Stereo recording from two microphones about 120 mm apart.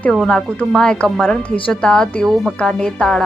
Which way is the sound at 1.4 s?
45° left (ahead or behind).